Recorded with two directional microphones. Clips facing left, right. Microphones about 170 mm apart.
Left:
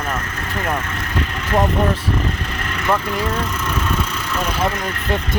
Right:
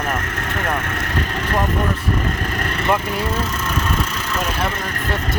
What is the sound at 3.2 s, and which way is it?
Speech, 5° right (ahead or behind).